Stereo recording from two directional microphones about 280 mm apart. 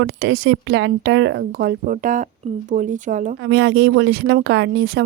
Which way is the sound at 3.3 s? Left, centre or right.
Right.